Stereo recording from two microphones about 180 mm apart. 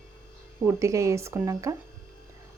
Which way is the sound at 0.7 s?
15° right (ahead or behind).